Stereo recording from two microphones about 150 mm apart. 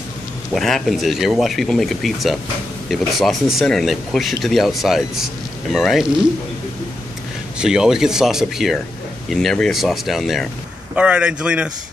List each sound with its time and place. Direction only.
0.6 s speech: centre (ahead or behind)
7.5 s a man's voice: 5° right (ahead or behind)